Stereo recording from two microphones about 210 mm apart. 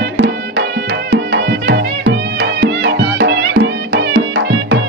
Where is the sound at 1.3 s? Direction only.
55° right (ahead or behind).